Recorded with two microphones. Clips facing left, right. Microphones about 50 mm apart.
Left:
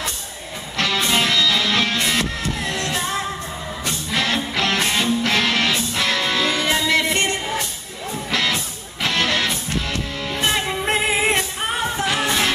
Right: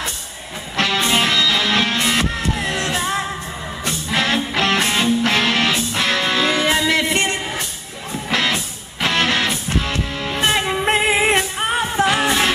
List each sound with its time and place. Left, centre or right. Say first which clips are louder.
0.7 s music: right 2 dB; centre
4.1 s music: right 3 dB; centre
8.3 s music: right 3 dB; right